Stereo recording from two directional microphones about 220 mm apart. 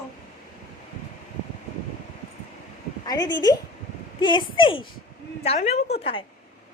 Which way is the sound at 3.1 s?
20° left (ahead or behind).